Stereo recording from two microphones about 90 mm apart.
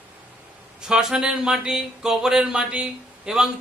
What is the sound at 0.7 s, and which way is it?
Speech, 10° right (ahead or behind).